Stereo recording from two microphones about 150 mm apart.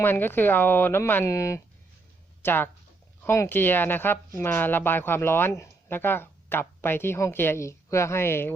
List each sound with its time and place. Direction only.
0.0 s speech: 15° left (ahead or behind)